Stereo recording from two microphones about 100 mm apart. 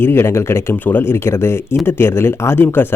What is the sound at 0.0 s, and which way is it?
Speech, 25° left (ahead or behind).